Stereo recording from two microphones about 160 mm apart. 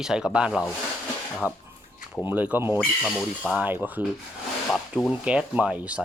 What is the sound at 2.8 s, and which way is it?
Speech, 5° left (ahead or behind).